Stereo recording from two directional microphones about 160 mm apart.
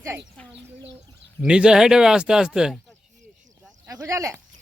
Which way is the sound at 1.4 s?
5° right (ahead or behind).